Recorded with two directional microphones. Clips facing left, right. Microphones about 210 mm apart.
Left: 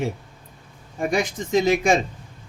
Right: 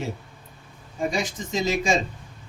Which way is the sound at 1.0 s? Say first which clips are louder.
Left 3 dB; 60° left (ahead or behind).